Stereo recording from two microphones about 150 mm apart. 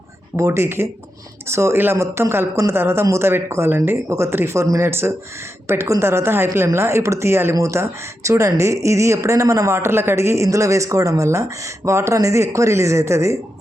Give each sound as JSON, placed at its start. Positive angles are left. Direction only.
{"t": 0.3, "sound": "speech", "side_deg": -20}